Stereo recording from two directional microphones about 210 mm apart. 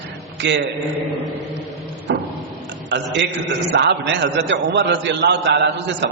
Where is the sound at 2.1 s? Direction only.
55° right (ahead or behind).